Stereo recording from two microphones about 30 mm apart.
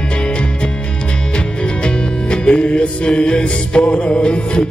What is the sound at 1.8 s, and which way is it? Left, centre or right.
Music, left.